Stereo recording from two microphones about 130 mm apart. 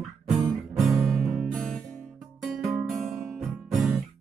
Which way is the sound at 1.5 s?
Centre (ahead or behind).